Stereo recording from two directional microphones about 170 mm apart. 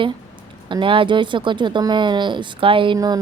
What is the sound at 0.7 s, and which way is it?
Speech, 30° right (ahead or behind).